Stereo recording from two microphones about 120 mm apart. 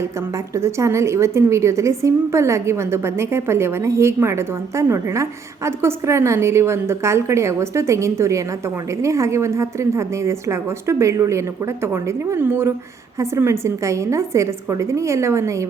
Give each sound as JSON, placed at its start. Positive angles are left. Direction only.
{"t": 0.5, "sound": "a woman's voice", "side_deg": -25}